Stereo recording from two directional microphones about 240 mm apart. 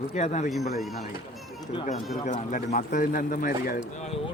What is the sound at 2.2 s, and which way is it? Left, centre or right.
Speech, left.